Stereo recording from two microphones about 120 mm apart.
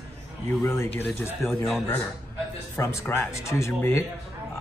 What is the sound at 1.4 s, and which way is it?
Speech, centre (ahead or behind).